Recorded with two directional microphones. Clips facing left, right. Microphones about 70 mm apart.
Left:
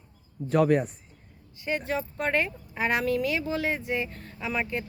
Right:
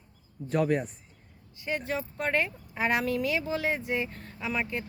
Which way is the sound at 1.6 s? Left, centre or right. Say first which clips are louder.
Left 2 dB; centre.